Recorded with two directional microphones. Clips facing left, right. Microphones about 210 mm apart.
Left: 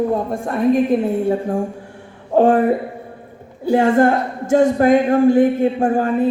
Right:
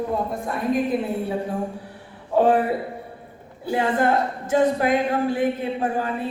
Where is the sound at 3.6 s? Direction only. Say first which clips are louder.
Left 7 dB; 45° left (ahead or behind).